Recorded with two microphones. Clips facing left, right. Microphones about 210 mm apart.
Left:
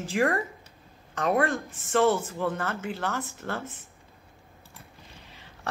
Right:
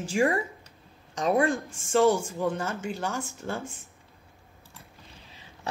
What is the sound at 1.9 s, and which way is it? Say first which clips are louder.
Speech: right 1 dB; 10° right (ahead or behind).